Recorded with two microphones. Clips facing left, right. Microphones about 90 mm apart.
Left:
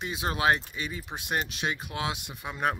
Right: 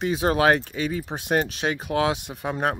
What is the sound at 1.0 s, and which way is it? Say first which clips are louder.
Speech: right 5 dB; 40° right (ahead or behind).